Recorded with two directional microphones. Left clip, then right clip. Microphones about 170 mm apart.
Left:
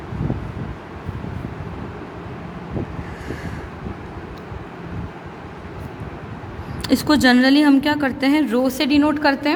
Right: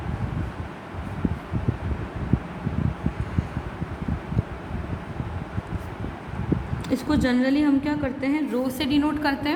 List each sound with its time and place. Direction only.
6.8 s a woman's voice: 50° left (ahead or behind); by 9.5 s 30° left (ahead or behind)